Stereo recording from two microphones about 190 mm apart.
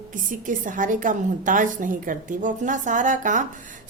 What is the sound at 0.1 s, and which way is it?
A woman's voice, 45° right (ahead or behind).